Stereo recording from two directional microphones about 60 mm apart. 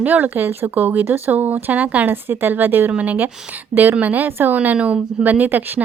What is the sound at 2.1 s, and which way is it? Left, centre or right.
Speech, right.